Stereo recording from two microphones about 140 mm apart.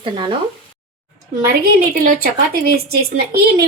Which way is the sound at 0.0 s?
40° right (ahead or behind).